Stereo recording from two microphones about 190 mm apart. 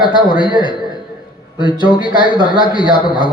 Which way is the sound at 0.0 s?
25° left (ahead or behind).